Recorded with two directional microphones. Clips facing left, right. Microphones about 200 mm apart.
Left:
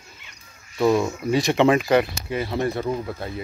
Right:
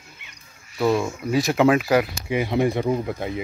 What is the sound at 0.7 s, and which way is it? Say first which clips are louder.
Speech: left 2 dB; centre (ahead or behind).